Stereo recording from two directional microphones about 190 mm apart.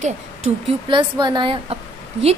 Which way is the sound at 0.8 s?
25° right (ahead or behind).